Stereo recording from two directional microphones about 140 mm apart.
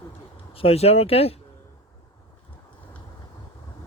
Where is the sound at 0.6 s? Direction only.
45° left (ahead or behind).